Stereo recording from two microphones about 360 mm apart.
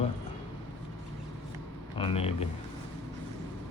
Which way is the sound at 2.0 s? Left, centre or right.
Centre.